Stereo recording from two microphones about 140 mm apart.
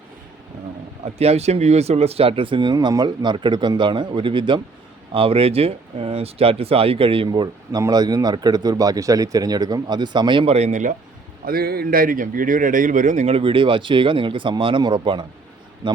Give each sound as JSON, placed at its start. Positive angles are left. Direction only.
{"t": 1.0, "sound": "speech", "side_deg": -50}
{"t": 11.4, "sound": "speech", "side_deg": -90}